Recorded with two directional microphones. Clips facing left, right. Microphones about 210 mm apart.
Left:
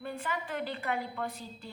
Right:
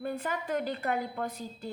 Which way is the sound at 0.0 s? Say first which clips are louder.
Right 3 dB; 45° right (ahead or behind).